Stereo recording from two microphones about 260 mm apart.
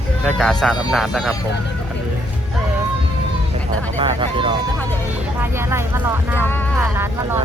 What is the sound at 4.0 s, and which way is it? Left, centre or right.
Speech, centre.